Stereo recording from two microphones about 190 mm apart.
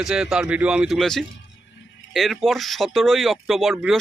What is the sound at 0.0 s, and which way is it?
Speech, 5° right (ahead or behind).